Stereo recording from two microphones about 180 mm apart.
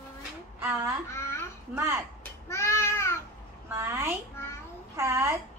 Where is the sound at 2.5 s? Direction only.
15° left (ahead or behind).